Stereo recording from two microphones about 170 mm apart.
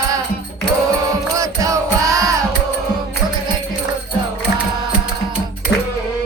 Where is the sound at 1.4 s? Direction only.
20° right (ahead or behind).